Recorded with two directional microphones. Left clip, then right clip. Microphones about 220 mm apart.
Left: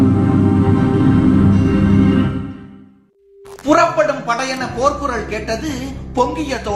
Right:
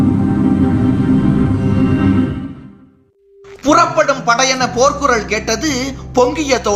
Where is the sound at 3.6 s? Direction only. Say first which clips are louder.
Right 2 dB; 45° right (ahead or behind).